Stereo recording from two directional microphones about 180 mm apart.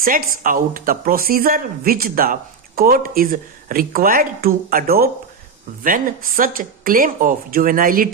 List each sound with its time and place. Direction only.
0.0 s speech: 50° right (ahead or behind)